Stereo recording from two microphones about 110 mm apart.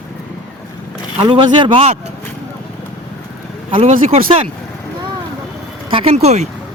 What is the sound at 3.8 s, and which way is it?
Speech, 70° right (ahead or behind).